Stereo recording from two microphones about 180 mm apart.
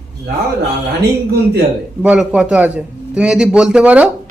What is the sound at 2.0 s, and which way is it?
A man's voice, 5° right (ahead or behind).